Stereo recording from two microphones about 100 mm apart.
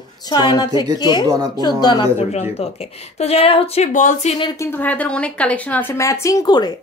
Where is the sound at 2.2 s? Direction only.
90° left.